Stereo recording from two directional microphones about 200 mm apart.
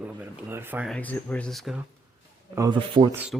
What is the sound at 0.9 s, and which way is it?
Speech, 10° left (ahead or behind).